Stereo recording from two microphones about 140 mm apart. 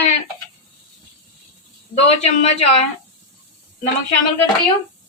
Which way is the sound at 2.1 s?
50° left (ahead or behind).